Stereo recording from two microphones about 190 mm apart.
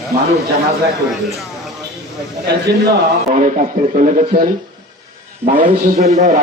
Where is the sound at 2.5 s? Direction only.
60° right (ahead or behind).